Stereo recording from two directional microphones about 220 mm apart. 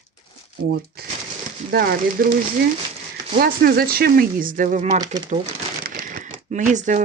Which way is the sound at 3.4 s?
45° right (ahead or behind).